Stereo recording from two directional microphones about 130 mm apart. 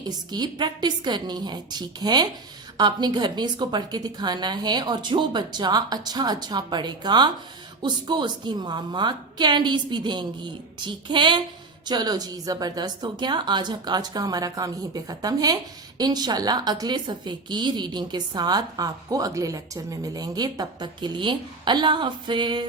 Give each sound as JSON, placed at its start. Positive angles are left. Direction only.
{"t": 0.0, "sound": "a woman's voice", "side_deg": -30}